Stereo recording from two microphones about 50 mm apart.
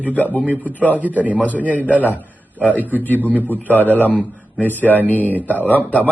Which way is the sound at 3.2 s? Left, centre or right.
Right.